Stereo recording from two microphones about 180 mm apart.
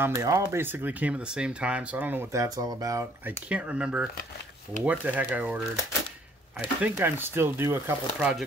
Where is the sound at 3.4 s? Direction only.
5° right (ahead or behind).